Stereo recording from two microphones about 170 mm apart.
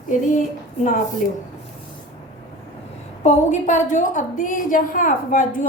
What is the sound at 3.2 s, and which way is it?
A woman's voice, 45° left (ahead or behind).